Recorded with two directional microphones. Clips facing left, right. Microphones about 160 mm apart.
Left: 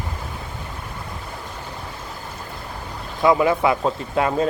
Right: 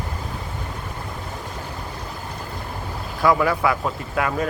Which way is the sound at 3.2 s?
20° left (ahead or behind).